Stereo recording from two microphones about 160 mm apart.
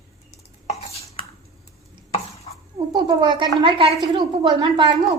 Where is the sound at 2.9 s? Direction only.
30° right (ahead or behind).